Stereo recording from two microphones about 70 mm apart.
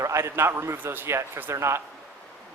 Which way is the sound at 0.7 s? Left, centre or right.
Right.